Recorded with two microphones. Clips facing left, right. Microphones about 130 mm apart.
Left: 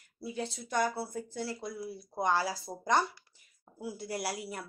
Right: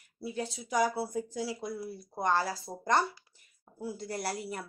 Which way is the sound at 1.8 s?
10° left (ahead or behind).